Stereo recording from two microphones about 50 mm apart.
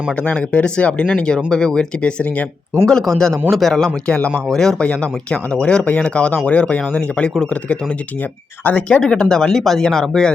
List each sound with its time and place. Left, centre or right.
0.2 s speech: left
2.8 s speech: centre
3.8 s speech: left
4.4 s speech: centre
4.8 s speech: left